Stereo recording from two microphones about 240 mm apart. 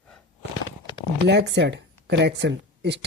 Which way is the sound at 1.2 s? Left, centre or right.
Right.